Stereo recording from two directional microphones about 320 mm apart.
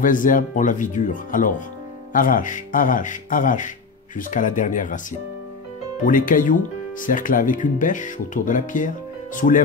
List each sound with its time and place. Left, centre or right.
0.0 s speech: left
6.0 s speech: left